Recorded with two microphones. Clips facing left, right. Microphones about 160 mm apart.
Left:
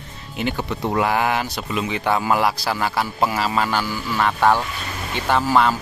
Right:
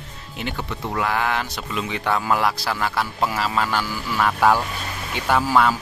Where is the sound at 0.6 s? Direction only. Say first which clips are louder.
Left 4 dB; 25° left (ahead or behind).